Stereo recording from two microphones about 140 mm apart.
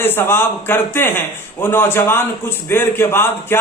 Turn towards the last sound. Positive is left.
turn(degrees=15)  # may be behind; listen again after turning